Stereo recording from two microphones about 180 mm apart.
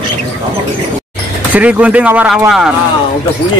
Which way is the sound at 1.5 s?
5° right (ahead or behind).